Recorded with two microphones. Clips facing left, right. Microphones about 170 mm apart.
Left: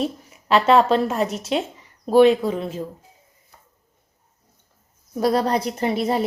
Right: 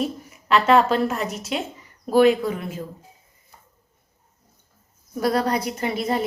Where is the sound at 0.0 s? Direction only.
30° left (ahead or behind).